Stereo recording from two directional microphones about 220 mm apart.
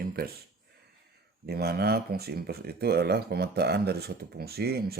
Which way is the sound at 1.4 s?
45° right (ahead or behind).